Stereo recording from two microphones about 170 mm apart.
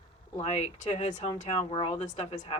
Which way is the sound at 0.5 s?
45° left (ahead or behind).